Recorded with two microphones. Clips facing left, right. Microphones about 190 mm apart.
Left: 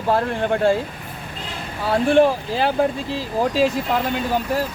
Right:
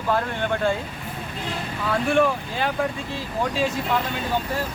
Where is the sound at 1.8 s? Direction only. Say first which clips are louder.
Left 5 dB; 35° left (ahead or behind).